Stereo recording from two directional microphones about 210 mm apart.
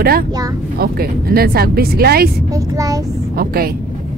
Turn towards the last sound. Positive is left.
turn(degrees=-45)  # may be behind; listen again after turning